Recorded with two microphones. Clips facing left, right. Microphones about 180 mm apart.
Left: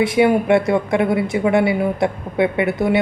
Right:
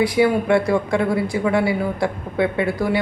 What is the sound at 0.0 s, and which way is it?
Speech, 20° left (ahead or behind).